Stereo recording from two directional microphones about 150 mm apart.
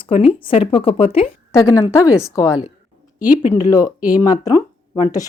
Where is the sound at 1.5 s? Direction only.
25° left (ahead or behind).